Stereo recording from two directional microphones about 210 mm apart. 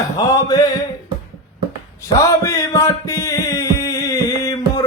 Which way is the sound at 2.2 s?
15° left (ahead or behind).